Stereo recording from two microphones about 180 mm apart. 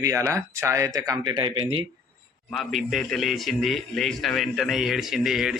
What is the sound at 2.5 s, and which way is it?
A man's voice, centre (ahead or behind).